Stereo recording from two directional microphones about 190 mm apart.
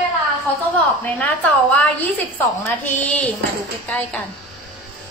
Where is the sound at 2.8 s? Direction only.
10° left (ahead or behind).